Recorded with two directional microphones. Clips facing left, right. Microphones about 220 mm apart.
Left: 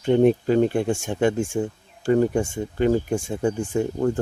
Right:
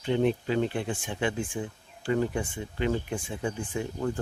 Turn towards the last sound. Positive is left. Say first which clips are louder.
# left 8 dB
turn(degrees=45)  # may be behind; listen again after turning